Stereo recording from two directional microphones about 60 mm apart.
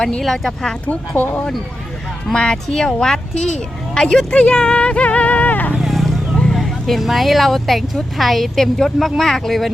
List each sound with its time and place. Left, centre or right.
0.2 s speech: centre
0.9 s speech: left
2.3 s speech: centre
5.7 s vehicle: centre
6.5 s speech: centre